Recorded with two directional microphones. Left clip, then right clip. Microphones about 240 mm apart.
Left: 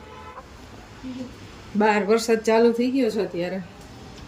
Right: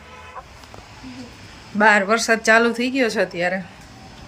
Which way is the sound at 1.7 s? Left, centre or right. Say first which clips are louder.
Right 5 dB; centre.